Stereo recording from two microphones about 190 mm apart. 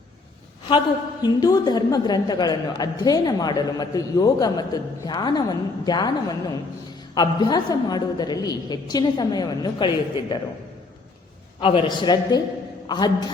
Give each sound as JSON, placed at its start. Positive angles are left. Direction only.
{"t": 1.2, "sound": "a woman's voice", "side_deg": 20}
{"t": 11.6, "sound": "a woman's voice", "side_deg": 30}